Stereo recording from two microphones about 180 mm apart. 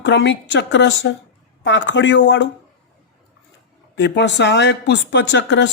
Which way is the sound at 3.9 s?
75° left (ahead or behind).